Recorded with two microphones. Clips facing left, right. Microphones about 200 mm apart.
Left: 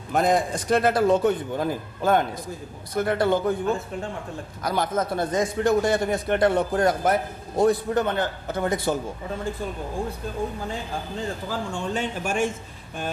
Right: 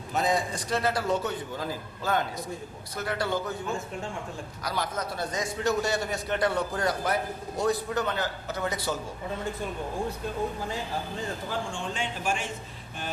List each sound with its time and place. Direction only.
0.1 s a man's voice: 55° left (ahead or behind)
4.6 s a man's voice: 50° left (ahead or behind)
11.7 s a man's voice: 45° left (ahead or behind)